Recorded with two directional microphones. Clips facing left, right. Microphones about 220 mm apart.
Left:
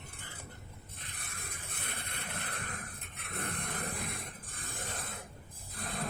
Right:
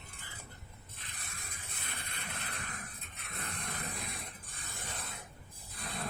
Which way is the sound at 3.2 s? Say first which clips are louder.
Left 5 dB; 55° left (ahead or behind).